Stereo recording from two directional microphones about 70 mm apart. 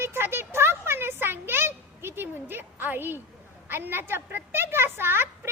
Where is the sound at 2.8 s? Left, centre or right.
Right.